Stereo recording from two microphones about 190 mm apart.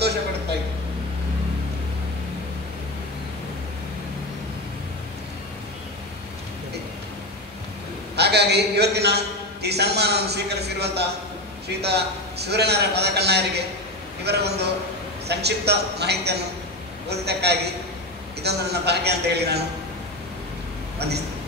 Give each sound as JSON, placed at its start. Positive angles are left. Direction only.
{"t": 8.2, "sound": "a man's voice", "side_deg": -60}